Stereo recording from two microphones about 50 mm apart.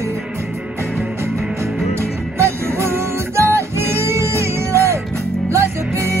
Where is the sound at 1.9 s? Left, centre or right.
Right.